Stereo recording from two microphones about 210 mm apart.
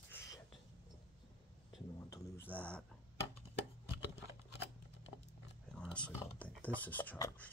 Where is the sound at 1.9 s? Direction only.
15° left (ahead or behind).